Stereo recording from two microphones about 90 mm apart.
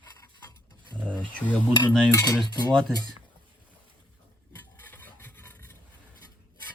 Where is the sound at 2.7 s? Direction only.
5° left (ahead or behind).